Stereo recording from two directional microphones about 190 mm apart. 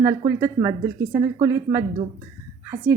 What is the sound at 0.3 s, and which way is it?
A woman's voice, 15° right (ahead or behind).